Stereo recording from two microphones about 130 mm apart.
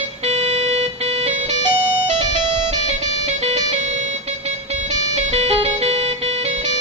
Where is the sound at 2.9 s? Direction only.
60° right (ahead or behind).